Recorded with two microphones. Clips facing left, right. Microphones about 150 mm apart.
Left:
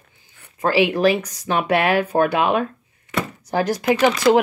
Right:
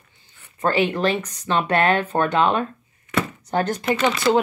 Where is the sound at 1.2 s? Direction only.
90° left.